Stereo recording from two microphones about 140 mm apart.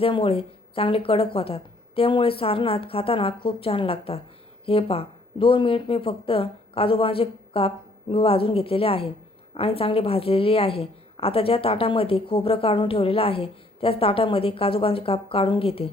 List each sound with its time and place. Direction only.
0.0 s a woman's voice: 40° left (ahead or behind)